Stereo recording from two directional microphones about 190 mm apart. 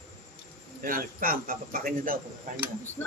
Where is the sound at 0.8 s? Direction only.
50° right (ahead or behind).